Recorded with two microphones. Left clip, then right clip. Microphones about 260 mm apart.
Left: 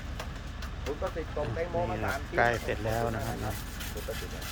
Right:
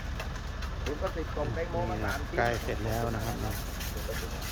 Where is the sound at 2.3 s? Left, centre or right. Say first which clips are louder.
Left 3 dB; centre.